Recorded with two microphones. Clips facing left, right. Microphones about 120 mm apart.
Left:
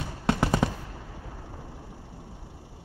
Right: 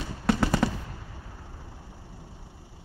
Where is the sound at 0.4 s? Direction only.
15° left (ahead or behind).